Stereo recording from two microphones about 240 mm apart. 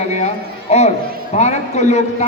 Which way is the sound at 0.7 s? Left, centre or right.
Left.